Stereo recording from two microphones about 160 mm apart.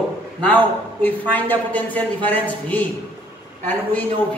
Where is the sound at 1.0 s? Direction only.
10° left (ahead or behind).